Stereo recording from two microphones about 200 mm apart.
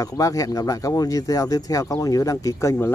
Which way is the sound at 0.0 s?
15° left (ahead or behind).